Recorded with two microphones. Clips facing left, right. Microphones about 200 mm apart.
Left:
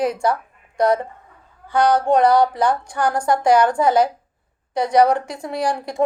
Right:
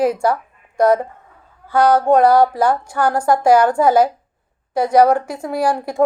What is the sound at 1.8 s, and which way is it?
Music, 50° right (ahead or behind).